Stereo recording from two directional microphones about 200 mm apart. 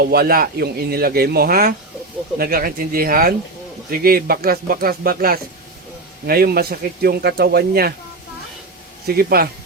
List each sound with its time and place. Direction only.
0.0 s speech: 50° right (ahead or behind)
9.0 s speech: 50° right (ahead or behind)